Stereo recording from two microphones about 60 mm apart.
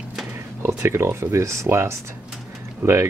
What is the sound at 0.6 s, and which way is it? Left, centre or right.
Speech, right.